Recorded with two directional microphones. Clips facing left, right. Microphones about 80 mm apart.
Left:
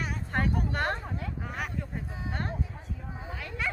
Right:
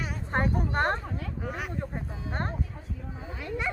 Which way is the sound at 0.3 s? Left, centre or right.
Right.